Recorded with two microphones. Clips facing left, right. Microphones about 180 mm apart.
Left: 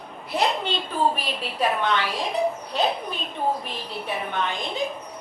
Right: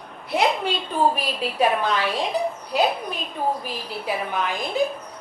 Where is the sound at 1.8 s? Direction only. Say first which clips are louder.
Right 1 dB; 30° right (ahead or behind).